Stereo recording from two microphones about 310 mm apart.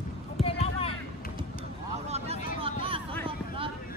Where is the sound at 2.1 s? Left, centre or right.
Centre.